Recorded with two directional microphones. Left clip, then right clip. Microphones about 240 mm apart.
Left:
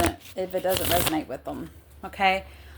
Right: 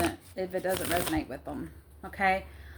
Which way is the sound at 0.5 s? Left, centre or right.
Left.